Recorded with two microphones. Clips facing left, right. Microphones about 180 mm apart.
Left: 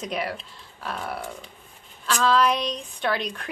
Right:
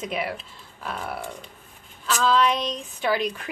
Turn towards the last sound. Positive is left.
turn(degrees=-5)  # may be behind; listen again after turning